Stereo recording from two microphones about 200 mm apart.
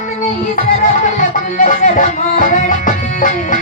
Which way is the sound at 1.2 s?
40° left (ahead or behind).